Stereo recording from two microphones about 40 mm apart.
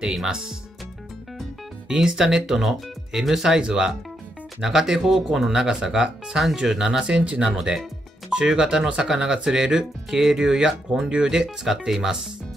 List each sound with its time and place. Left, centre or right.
0.0 s speech: centre
1.9 s speech: centre
7.5 s speech: centre